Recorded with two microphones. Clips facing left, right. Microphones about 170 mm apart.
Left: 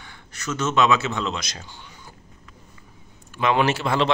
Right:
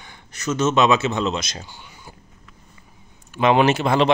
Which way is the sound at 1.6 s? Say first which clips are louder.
Right 1 dB; 10° right (ahead or behind).